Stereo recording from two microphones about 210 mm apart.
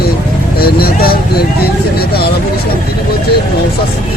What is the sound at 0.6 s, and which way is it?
Speech, 45° left (ahead or behind).